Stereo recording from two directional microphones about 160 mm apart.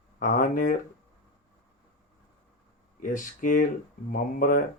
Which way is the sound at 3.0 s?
55° left (ahead or behind).